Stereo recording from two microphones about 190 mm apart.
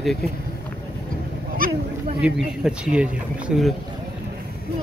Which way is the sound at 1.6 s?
50° right (ahead or behind).